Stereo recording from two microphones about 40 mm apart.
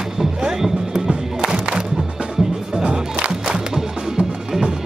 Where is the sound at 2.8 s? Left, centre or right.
Right.